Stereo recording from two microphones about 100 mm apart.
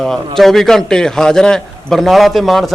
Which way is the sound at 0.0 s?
5° left (ahead or behind).